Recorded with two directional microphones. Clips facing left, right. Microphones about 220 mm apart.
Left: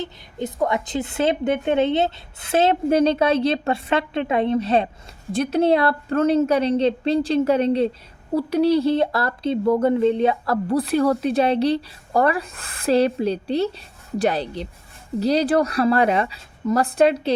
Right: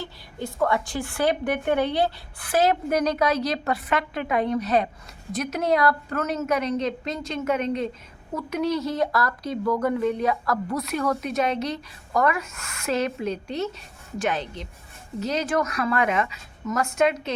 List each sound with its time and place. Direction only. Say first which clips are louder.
0.0 s speech: left 5 dB; 20° left (ahead or behind)